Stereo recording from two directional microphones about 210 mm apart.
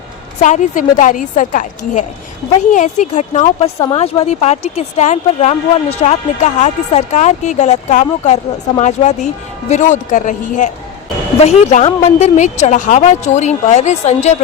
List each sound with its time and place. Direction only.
0.4 s speech: 35° left (ahead or behind)